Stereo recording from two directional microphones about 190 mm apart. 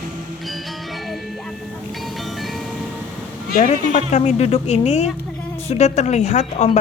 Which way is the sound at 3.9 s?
35° left (ahead or behind).